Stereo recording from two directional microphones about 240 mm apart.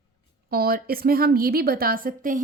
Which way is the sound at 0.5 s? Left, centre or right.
Right.